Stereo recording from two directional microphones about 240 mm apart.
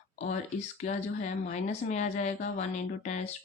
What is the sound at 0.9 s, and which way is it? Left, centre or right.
Speech, left.